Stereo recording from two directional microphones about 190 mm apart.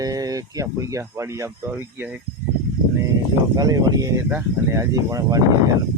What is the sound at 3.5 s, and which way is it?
Speech, 20° right (ahead or behind).